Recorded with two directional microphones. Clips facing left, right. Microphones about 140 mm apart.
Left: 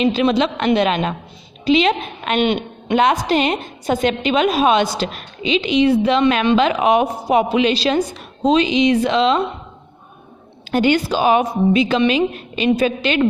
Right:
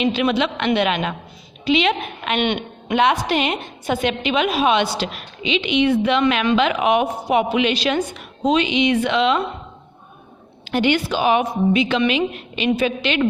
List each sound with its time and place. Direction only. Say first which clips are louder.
0.0 s a woman's voice: left 3 dB; 35° left (ahead or behind)
10.7 s a woman's voice: left 3 dB; 40° left (ahead or behind)